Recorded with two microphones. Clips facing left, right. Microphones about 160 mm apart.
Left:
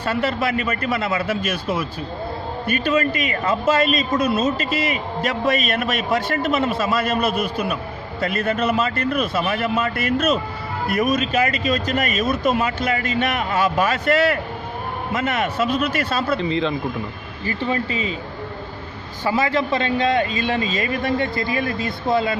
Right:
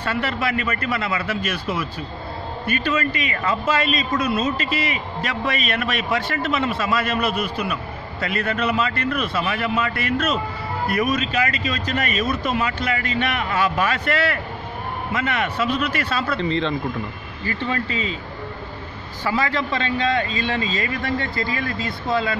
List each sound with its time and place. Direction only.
0.1 s a man's voice: 40° left (ahead or behind)
16.3 s a man's voice: 10° left (ahead or behind)
17.5 s speech: 20° left (ahead or behind)
19.2 s a man's voice: 20° left (ahead or behind)